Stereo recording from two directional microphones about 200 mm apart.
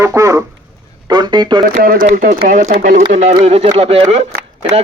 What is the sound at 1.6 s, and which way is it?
Speech, 45° right (ahead or behind).